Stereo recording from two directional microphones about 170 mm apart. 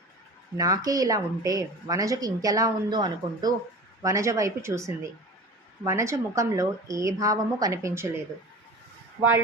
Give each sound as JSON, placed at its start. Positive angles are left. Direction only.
{"t": 0.5, "sound": "a woman's voice", "side_deg": -20}